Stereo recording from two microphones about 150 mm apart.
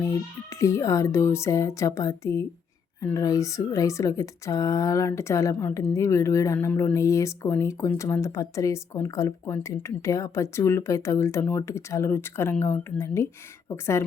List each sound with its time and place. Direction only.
0.0 s speech: 20° left (ahead or behind)